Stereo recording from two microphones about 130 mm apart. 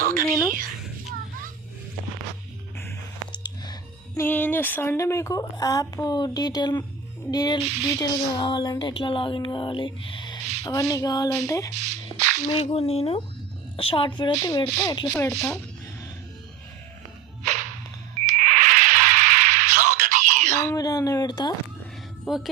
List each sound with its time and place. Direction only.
0.0 s a woman's voice: 90° right
3.3 s a sound: 35° left (ahead or behind)
4.2 s speech: 15° left (ahead or behind); by 10.4 s 35° left (ahead or behind)
10.6 s speech: 25° left (ahead or behind)
11.7 s drip: 60° right (ahead or behind)
12.5 s speech: 50° left (ahead or behind); by 14.7 s 30° left (ahead or behind)
15.2 s speech: 20° left (ahead or behind)
18.3 s a sound: 75° right (ahead or behind)
20.7 s a sound: 30° left (ahead or behind)
22.3 s speech: 5° right (ahead or behind)